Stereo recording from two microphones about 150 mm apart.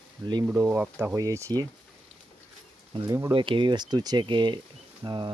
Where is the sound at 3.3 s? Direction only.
35° right (ahead or behind).